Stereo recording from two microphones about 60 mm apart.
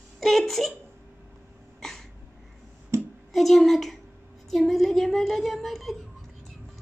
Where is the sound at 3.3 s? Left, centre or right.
Centre.